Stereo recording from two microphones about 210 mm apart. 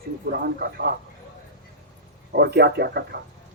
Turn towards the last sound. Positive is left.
turn(degrees=-50)  # may be behind; listen again after turning